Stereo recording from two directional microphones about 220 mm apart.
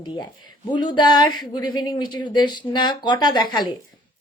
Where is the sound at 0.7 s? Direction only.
20° left (ahead or behind).